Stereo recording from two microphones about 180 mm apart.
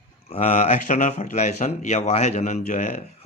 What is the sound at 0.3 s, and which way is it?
Speech, 40° left (ahead or behind).